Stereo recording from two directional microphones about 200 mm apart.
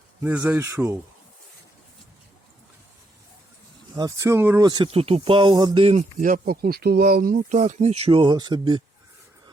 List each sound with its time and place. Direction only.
0.2 s speech: 10° right (ahead or behind)
3.9 s speech: 15° right (ahead or behind)